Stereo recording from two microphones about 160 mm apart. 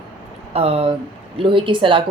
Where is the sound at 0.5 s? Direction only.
40° right (ahead or behind).